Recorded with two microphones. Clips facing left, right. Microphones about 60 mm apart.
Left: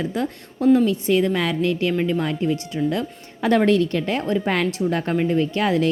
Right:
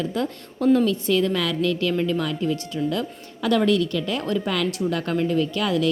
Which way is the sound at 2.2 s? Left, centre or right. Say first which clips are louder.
Left 2 dB; left.